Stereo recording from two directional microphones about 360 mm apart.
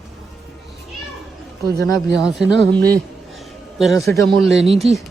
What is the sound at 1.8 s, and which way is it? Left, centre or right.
Speech, centre.